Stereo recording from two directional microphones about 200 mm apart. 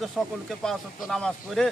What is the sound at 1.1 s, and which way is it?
Speech, centre (ahead or behind).